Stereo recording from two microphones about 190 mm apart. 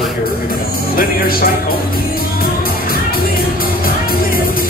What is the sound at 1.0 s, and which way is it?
Speech, 50° left (ahead or behind).